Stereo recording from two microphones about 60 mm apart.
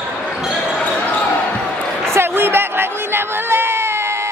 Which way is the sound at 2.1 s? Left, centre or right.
Right.